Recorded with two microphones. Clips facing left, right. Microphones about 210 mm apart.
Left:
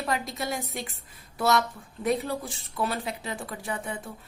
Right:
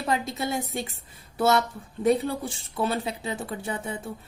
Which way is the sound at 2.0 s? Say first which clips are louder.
Right 4 dB; 30° right (ahead or behind).